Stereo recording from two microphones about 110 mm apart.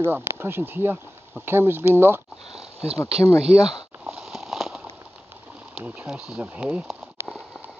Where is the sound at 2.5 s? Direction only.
65° right (ahead or behind).